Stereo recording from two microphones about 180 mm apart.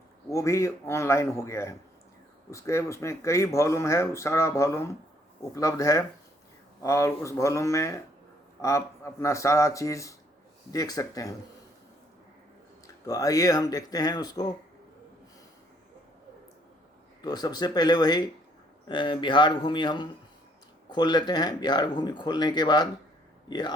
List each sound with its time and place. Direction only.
0.3 s speech: 15° left (ahead or behind)
13.1 s speech: 20° left (ahead or behind)
17.2 s speech: 20° left (ahead or behind)